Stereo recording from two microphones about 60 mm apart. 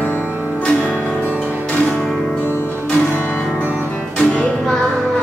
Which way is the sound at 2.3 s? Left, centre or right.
Left.